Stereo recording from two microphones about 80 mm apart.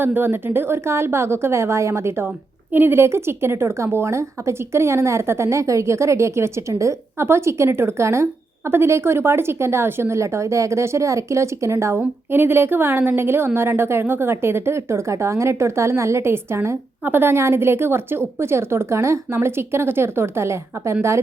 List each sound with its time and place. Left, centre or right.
0.0 s a woman's voice: right